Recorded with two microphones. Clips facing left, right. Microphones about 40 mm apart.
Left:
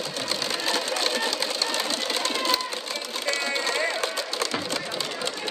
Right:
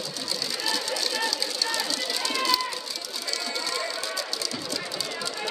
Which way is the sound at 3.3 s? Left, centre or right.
Left.